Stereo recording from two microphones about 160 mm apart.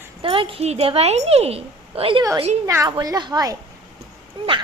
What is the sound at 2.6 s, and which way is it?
A woman's voice, 20° right (ahead or behind).